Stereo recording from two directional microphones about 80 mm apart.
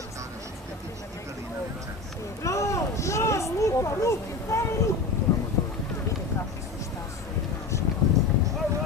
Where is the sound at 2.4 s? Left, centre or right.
Left.